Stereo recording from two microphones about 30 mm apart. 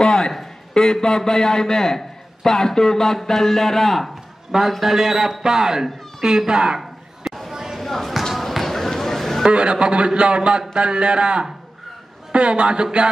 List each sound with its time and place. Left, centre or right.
0.0 s a sound: left
0.7 s a man's voice: left
4.5 s a man's voice: centre; by 6.8 s right
6.8 s a sound: centre
7.8 s basketball bounce: centre
9.5 s a man's voice: right